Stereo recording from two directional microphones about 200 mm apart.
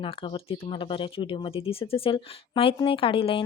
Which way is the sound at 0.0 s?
25° left (ahead or behind).